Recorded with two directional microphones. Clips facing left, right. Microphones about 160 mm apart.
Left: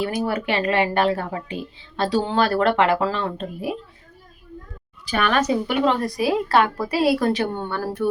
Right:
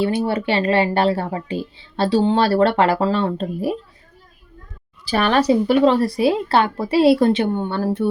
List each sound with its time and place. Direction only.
0.0 s speech: 30° right (ahead or behind)
5.0 s a woman's voice: 35° right (ahead or behind)